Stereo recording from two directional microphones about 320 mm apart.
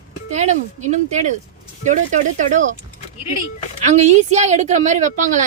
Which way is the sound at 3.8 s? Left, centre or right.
Right.